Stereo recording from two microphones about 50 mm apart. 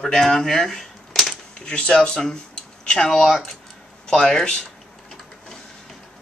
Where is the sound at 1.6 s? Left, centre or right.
Centre.